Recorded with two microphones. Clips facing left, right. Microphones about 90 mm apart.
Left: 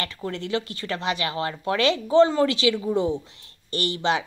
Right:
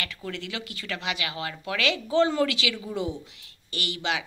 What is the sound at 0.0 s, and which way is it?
A woman's voice, 30° left (ahead or behind).